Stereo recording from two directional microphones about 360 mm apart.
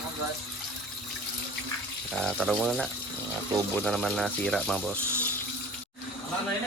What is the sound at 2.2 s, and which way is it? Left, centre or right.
Speech, centre.